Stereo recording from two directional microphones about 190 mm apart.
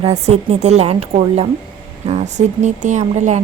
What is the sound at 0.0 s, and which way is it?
A woman's voice, 35° right (ahead or behind).